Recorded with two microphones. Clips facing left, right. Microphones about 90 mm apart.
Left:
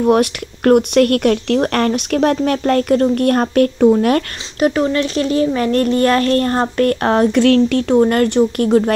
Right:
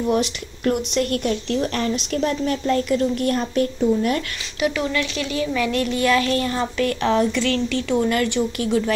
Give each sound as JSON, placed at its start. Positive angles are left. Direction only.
{"t": 0.0, "sound": "speech", "side_deg": 55}
{"t": 4.6, "sound": "speech", "side_deg": 40}